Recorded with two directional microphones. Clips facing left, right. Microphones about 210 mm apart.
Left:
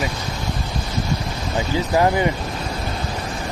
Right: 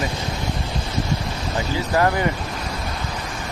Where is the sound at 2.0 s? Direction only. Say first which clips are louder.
Left 2 dB; 20° left (ahead or behind).